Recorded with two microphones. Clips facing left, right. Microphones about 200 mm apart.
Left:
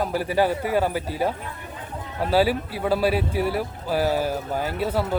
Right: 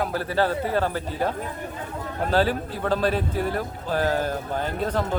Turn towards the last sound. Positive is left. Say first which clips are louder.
# left 1 dB
turn(degrees=10)  # may be behind; listen again after turning